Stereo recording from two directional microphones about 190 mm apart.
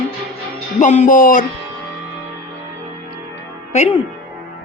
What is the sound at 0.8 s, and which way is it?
Music, 40° left (ahead or behind).